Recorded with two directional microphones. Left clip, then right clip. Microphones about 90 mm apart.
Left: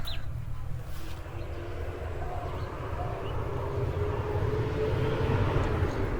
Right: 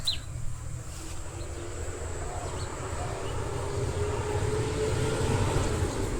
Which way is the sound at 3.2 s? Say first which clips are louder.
Right 1 dB; 60° right (ahead or behind).